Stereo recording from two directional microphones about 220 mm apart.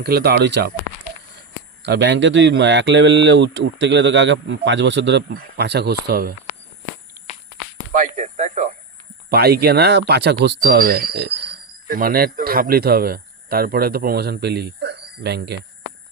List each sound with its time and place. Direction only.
0.0 s speech: 45° right (ahead or behind)
1.8 s speech: 50° right (ahead or behind)
7.9 s a sound: 35° right (ahead or behind)
9.3 s speech: 45° right (ahead or behind)